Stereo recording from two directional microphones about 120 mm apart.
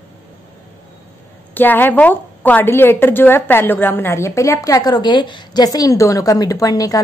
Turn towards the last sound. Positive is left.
turn(degrees=30)  # may be behind; listen again after turning